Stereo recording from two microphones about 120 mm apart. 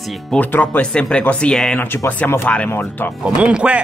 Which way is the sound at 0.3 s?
15° left (ahead or behind).